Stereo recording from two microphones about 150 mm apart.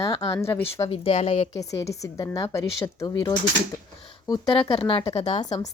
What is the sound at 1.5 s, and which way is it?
A woman's voice, 20° left (ahead or behind).